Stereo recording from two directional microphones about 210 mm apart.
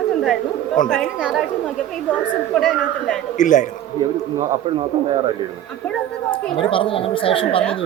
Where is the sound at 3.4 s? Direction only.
35° left (ahead or behind).